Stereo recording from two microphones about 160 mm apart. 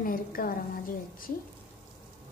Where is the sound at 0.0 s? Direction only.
65° left (ahead or behind).